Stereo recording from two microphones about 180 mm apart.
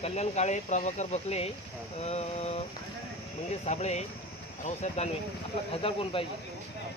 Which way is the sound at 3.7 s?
40° left (ahead or behind).